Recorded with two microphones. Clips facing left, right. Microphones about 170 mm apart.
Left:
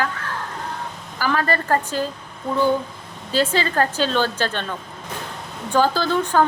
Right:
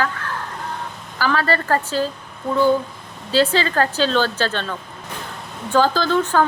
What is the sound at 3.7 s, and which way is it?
Speech, 15° left (ahead or behind).